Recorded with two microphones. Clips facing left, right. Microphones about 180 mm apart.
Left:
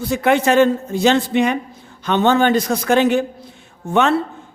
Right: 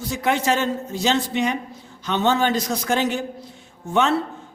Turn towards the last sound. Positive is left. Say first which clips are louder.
# left 4 dB
turn(degrees=60)  # may be behind; listen again after turning